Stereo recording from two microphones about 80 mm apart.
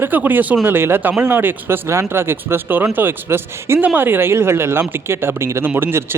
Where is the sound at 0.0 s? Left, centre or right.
Right.